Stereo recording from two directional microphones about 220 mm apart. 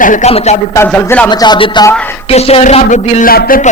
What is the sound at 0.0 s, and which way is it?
Speech, 35° left (ahead or behind).